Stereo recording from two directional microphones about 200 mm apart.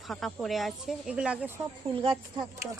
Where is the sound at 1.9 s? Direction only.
25° right (ahead or behind).